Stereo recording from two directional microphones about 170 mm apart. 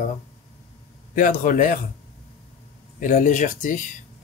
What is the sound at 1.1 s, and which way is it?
Speech, 50° left (ahead or behind).